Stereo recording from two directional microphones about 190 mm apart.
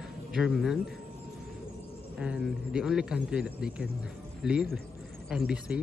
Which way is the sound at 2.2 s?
5° right (ahead or behind).